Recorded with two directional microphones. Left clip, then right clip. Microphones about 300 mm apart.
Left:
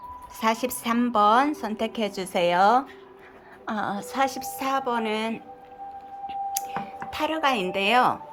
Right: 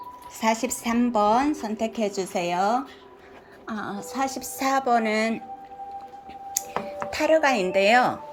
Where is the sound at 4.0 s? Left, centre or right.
Centre.